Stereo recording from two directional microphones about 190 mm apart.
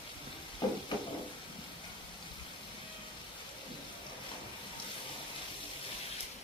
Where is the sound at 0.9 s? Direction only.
25° left (ahead or behind).